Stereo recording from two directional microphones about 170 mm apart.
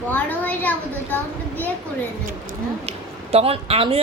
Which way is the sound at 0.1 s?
10° left (ahead or behind).